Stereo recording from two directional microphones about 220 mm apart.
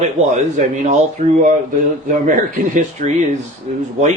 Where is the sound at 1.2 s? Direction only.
35° right (ahead or behind).